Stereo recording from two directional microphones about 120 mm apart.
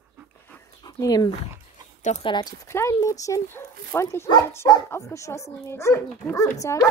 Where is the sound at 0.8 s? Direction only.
30° left (ahead or behind).